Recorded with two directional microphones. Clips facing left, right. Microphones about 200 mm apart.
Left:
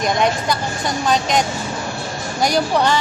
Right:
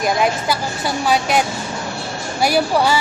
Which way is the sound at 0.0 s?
5° right (ahead or behind).